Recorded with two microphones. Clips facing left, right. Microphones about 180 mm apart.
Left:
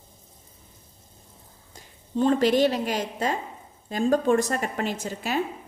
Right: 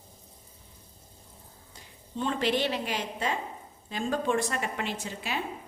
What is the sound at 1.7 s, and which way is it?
A woman's voice, 40° left (ahead or behind).